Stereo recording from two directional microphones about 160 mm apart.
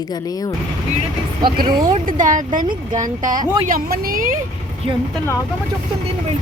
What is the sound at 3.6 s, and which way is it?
Speech, 65° right (ahead or behind).